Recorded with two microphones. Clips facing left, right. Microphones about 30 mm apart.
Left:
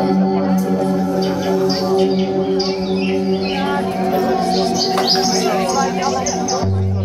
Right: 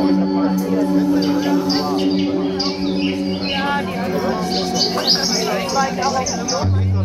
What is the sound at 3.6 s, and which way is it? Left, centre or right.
Music, right.